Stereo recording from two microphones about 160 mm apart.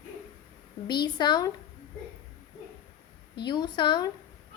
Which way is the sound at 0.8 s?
25° left (ahead or behind).